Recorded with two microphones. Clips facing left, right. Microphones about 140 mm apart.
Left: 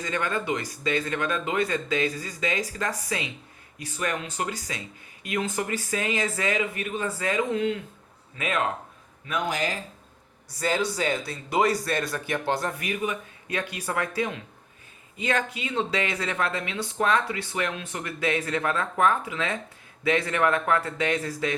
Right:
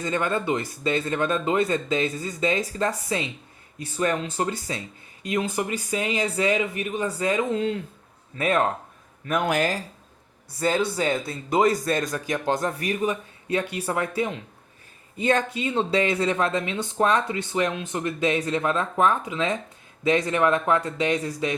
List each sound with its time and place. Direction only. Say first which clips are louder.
0.0 s speech: right 3 dB; 25° right (ahead or behind)
9.2 s speech: right 5 dB; 50° right (ahead or behind)
10.6 s speech: right 3 dB; 25° right (ahead or behind)
12.8 s speech: right 4 dB; 35° right (ahead or behind)
15.2 s speech: right 5 dB; 30° right (ahead or behind)